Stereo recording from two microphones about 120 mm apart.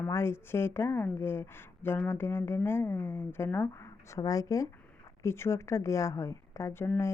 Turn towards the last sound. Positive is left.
turn(degrees=25)  # may be behind; listen again after turning